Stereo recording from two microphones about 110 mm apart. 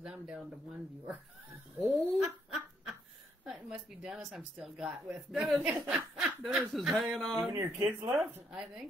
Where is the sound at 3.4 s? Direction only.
5° right (ahead or behind).